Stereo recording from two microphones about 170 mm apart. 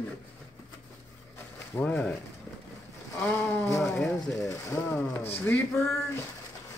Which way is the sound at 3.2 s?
10° left (ahead or behind).